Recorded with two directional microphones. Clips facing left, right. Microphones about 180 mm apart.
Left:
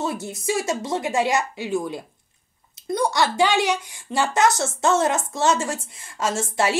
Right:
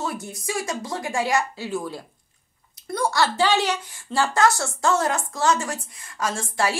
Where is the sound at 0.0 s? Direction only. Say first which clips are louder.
Left 3 dB; 25° left (ahead or behind).